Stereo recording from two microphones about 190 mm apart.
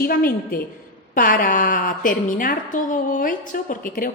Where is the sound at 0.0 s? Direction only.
50° left (ahead or behind).